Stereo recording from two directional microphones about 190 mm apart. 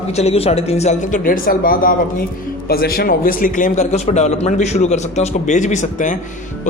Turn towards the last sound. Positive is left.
turn(degrees=40)  # may be behind; listen again after turning